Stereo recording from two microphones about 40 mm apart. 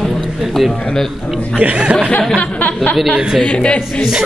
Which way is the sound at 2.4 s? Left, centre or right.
Left.